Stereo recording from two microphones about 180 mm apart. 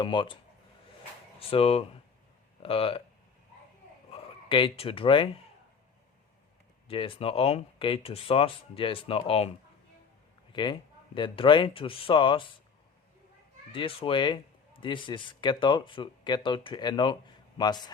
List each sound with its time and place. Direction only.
0.0 s a man's voice: 25° left (ahead or behind)
1.4 s speech: 30° left (ahead or behind)
4.1 s speech: 30° left (ahead or behind)
6.8 s a man's voice: 30° left (ahead or behind)
13.7 s a man's voice: 30° left (ahead or behind)